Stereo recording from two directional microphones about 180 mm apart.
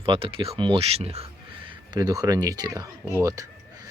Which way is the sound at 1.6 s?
25° right (ahead or behind).